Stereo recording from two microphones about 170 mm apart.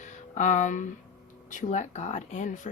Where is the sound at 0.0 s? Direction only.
45° left (ahead or behind).